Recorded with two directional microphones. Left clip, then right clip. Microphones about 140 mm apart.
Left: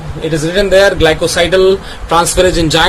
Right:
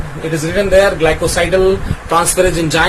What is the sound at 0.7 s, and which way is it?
Speech, 35° left (ahead or behind).